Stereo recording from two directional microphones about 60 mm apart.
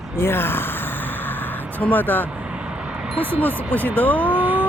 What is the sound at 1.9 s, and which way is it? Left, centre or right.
Speech, left.